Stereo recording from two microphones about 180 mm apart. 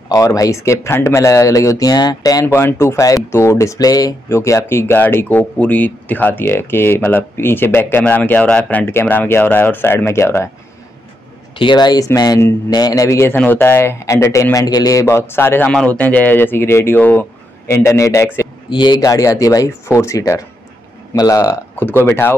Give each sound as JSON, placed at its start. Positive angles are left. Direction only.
{"t": 0.1, "sound": "speech", "side_deg": 20}
{"t": 11.5, "sound": "speech", "side_deg": 25}